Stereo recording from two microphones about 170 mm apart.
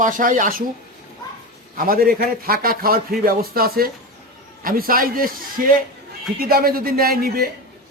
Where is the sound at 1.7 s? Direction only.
60° right (ahead or behind).